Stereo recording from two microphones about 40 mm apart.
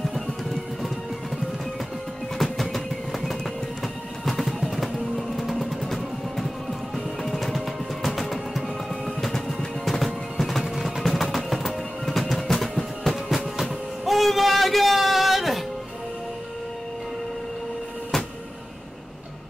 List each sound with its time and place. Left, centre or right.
0.1 s music: centre
2.3 s a sound: centre
3.8 s music: centre
13.1 s music: centre